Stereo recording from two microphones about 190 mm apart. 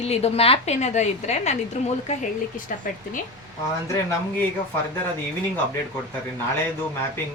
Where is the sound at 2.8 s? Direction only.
45° left (ahead or behind).